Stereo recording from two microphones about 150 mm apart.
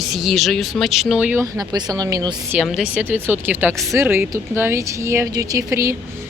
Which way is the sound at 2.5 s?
5° right (ahead or behind).